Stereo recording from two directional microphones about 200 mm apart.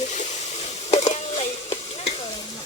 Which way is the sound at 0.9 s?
35° left (ahead or behind).